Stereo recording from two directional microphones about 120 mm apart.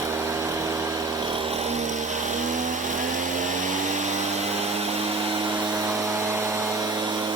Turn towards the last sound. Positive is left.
turn(degrees=-35)  # may be behind; listen again after turning